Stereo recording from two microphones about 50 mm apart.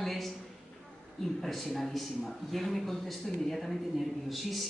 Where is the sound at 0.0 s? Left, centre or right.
Centre.